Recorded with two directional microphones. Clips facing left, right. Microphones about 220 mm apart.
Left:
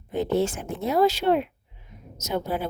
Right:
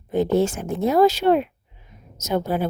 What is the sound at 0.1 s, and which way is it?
A woman's voice, 45° right (ahead or behind).